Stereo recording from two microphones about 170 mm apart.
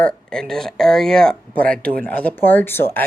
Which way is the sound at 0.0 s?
5° left (ahead or behind).